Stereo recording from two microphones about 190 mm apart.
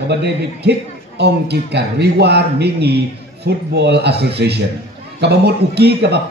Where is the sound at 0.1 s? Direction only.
65° right (ahead or behind).